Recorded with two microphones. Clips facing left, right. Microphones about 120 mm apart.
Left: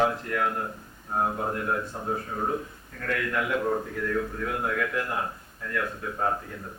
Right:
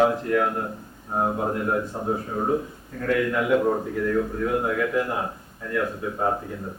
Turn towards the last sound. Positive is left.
turn(degrees=-20)  # may be behind; listen again after turning